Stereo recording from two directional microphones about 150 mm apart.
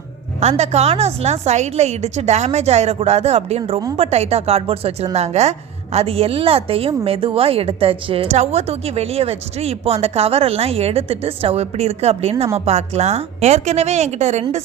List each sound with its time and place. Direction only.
0.3 s a woman's voice: 45° right (ahead or behind)